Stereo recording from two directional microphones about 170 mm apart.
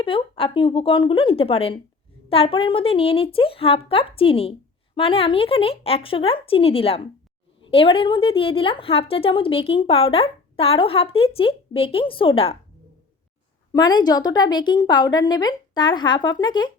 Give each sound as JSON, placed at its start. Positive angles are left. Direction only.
{"t": 0.0, "sound": "a woman's voice", "side_deg": 30}
{"t": 13.7, "sound": "a woman's voice", "side_deg": 25}